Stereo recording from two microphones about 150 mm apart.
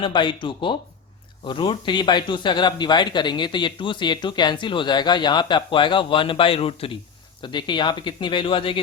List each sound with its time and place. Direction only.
0.0 s a man's voice: 30° left (ahead or behind)